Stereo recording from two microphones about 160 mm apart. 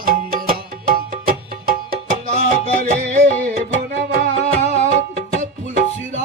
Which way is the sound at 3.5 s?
75° right (ahead or behind).